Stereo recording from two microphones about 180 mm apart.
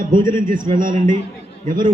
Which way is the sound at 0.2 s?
50° right (ahead or behind).